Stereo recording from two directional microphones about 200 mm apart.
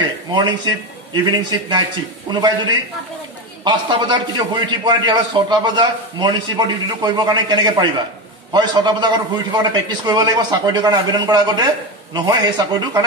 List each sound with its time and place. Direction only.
0.3 s a man's voice: 20° right (ahead or behind)